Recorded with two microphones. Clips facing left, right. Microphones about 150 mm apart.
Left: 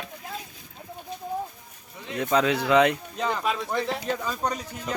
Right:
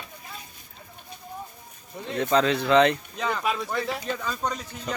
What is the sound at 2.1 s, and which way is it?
Speech, 5° left (ahead or behind).